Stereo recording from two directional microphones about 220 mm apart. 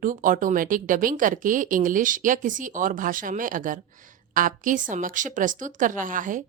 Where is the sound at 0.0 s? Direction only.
40° right (ahead or behind).